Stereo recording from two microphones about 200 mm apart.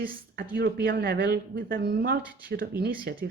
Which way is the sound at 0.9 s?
50° right (ahead or behind).